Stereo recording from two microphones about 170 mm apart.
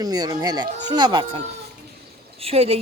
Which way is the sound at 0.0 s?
20° right (ahead or behind).